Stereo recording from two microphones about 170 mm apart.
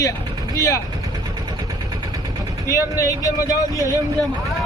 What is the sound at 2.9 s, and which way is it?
Speech, 20° left (ahead or behind).